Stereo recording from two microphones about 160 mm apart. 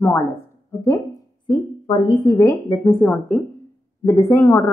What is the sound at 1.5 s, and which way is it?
A woman's voice, 30° left (ahead or behind).